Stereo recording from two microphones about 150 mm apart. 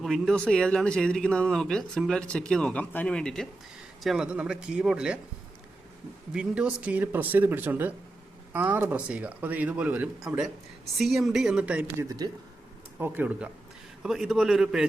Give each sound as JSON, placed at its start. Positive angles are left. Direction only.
{"t": 0.0, "sound": "speech", "side_deg": 0}
{"t": 6.3, "sound": "speech", "side_deg": -5}
{"t": 12.0, "sound": "speech", "side_deg": -25}
{"t": 13.0, "sound": "speech", "side_deg": -10}